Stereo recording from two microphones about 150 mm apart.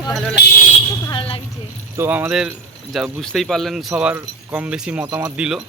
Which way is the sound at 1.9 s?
15° right (ahead or behind).